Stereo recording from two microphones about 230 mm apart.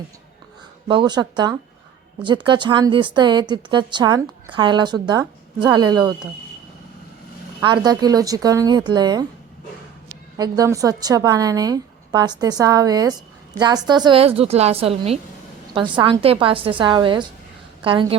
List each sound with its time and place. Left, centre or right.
0.9 s a woman's voice: centre
7.6 s a woman's voice: centre